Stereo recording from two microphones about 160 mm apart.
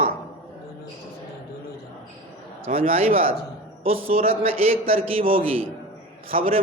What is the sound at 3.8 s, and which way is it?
A man's voice, 40° right (ahead or behind).